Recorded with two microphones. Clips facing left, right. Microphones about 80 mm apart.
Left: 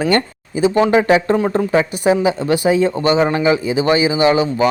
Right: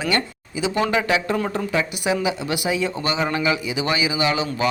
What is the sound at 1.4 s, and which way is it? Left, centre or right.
Speech, left.